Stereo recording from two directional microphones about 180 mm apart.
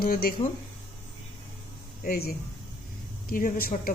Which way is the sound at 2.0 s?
60° left (ahead or behind).